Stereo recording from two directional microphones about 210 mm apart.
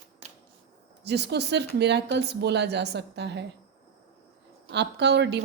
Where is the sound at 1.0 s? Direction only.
55° right (ahead or behind).